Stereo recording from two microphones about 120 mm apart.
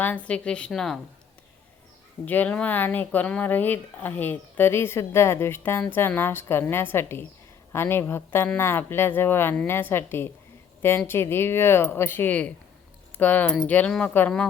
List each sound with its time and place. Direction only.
0.0 s speech: 10° left (ahead or behind)
2.2 s a woman's voice: 15° left (ahead or behind)